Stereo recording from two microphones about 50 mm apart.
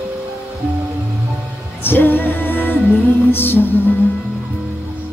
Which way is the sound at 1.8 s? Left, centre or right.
Left.